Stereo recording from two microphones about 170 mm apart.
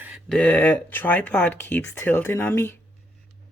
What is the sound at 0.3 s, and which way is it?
Speech, 10° left (ahead or behind).